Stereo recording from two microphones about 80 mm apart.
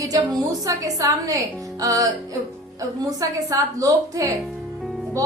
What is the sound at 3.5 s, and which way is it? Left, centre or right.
Speech, right.